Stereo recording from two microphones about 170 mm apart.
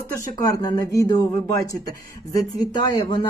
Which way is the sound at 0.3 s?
20° left (ahead or behind).